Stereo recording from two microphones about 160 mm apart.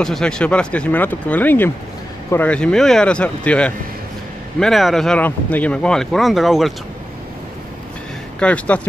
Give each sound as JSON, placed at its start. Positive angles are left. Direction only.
{"t": 0.0, "sound": "speech", "side_deg": 5}
{"t": 8.4, "sound": "speech", "side_deg": 10}